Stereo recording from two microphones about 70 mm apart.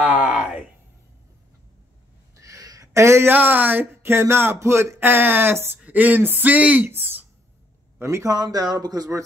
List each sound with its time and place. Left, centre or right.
0.0 s a sound: right
2.3 s a sound: right
2.9 s speech: right
3.3 s speech: right
4.0 s speech: right
8.0 s a man's voice: right
8.3 s speech: right